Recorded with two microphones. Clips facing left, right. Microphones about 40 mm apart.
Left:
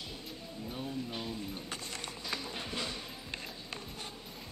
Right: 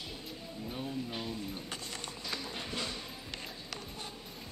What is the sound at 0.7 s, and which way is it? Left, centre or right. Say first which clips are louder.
Music: right 1 dB; centre.